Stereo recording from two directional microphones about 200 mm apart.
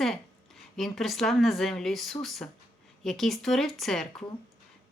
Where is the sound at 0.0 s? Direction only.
Centre (ahead or behind).